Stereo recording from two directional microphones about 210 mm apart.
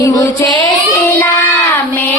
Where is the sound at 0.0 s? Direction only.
15° left (ahead or behind).